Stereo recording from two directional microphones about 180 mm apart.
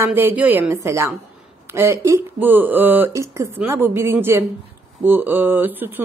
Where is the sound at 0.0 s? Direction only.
10° right (ahead or behind).